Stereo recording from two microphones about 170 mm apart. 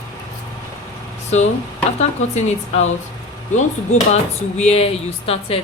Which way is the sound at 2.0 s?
40° left (ahead or behind).